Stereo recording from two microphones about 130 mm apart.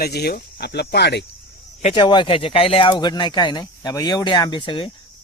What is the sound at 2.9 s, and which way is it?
A man's voice, 35° left (ahead or behind).